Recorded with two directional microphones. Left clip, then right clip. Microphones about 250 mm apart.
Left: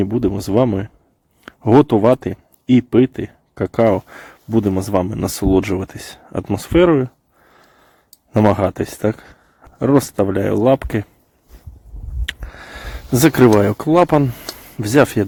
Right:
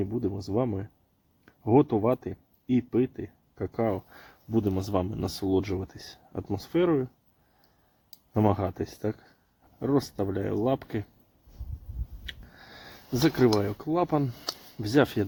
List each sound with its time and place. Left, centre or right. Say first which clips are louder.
0.0 s speech: left 12 dB; left
8.3 s speech: left 12 dB; left
12.2 s a sound: left 15 dB; left
14.8 s speech: left 11 dB; left